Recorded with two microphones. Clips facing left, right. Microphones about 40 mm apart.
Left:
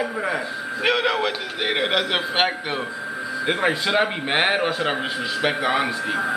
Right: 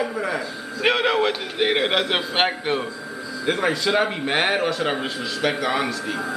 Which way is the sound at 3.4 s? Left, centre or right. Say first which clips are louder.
Right 1 dB; centre.